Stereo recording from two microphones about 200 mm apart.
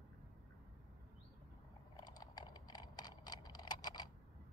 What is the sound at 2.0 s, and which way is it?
Typing, 20° left (ahead or behind).